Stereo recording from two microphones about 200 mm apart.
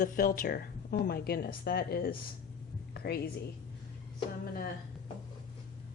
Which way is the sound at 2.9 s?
50° left (ahead or behind).